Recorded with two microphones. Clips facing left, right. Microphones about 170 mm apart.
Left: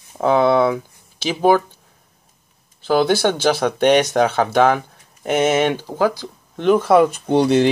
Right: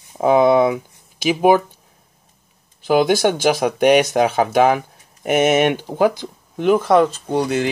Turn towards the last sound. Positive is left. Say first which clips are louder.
# left 5 dB
turn(degrees=30)  # may be behind; listen again after turning